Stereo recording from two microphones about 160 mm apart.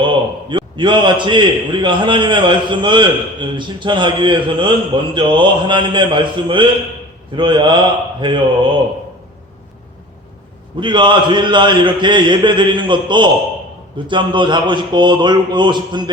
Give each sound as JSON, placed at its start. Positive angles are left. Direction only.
{"t": 0.0, "sound": "a man's voice", "side_deg": -30}
{"t": 10.8, "sound": "a man's voice", "side_deg": -30}